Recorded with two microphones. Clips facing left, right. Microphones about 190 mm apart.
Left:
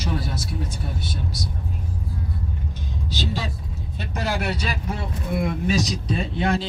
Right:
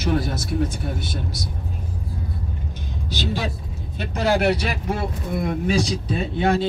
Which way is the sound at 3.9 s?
70° right (ahead or behind).